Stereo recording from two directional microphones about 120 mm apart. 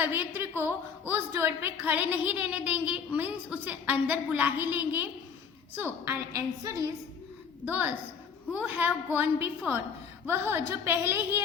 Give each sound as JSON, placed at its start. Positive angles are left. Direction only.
{"t": 0.0, "sound": "a woman's voice", "side_deg": -15}
{"t": 6.7, "sound": "a woman's voice", "side_deg": -30}
{"t": 7.6, "sound": "a woman's voice", "side_deg": -15}